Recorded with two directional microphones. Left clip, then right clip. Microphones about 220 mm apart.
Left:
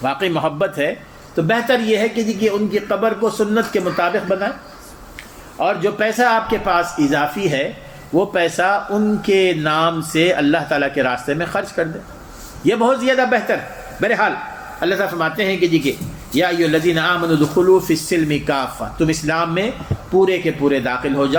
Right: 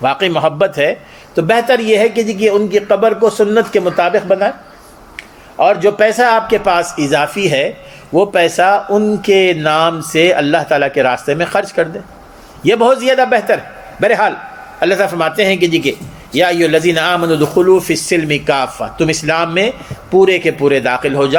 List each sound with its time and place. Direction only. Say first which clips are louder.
0.0 s speech: right 6 dB; 40° right (ahead or behind)
5.5 s speech: right 8 dB; 35° right (ahead or behind)
12.6 s speech: right 5 dB; 40° right (ahead or behind)